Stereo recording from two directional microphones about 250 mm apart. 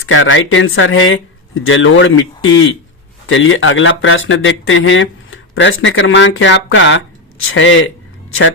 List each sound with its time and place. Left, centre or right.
0.1 s speech: left